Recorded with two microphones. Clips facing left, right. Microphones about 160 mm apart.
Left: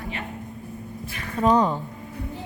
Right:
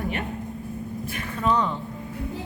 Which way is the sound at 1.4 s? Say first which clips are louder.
Left 4 dB; 40° left (ahead or behind).